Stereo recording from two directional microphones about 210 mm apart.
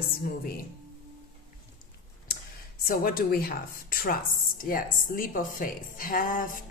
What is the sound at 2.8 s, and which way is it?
A woman's voice, 45° left (ahead or behind).